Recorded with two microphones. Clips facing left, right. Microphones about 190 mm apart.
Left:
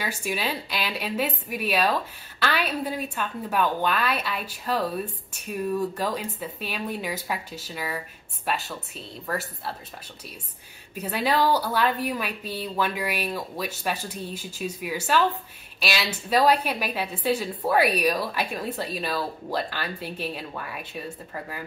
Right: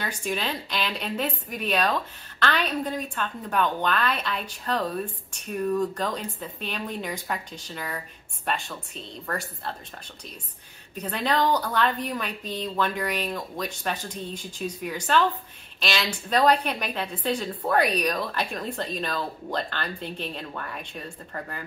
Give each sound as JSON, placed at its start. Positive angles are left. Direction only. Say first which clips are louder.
{"t": 0.0, "sound": "a woman's voice", "louder": "left 1 dB", "side_deg": 5}
{"t": 11.0, "sound": "a woman's voice", "louder": "left 1 dB", "side_deg": 10}